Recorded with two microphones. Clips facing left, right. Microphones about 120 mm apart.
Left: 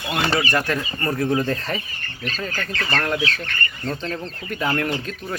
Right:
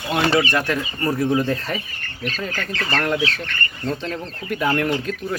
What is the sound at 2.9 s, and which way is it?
Speech, 20° right (ahead or behind).